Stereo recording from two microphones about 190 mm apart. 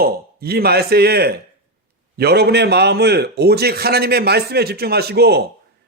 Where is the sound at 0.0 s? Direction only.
55° right (ahead or behind).